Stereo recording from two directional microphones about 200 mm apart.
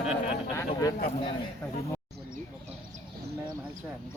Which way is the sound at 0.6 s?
15° left (ahead or behind).